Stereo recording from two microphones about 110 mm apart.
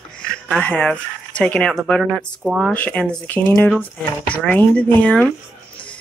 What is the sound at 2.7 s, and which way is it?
Speech, 10° left (ahead or behind).